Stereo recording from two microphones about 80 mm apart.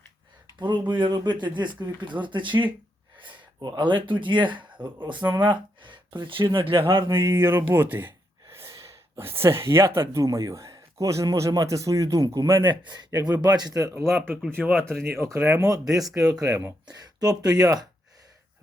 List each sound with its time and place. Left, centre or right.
0.6 s speech: right
2.2 s speech: right
3.2 s a sound: right
3.7 s speech: right
7.1 s speech: right
8.5 s a sound: right
10.1 s a man's voice: right
12.6 s speech: right
13.4 s a man's voice: right
13.9 s speech: right
16.0 s speech: centre
16.2 s a man's voice: right
16.8 s a man's voice: right